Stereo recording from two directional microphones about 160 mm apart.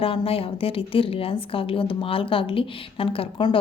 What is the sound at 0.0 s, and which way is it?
A woman's voice, 35° left (ahead or behind).